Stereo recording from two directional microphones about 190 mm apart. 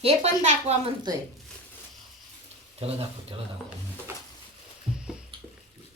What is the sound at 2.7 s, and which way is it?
Speech, 30° right (ahead or behind).